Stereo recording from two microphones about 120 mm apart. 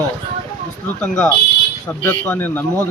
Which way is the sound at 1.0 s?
10° left (ahead or behind).